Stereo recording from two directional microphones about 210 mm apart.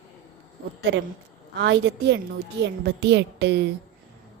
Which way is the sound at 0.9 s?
55° right (ahead or behind).